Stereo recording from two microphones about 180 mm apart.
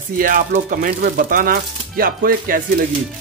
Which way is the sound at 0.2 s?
50° right (ahead or behind).